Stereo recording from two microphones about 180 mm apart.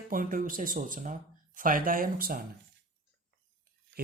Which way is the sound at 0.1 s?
50° right (ahead or behind).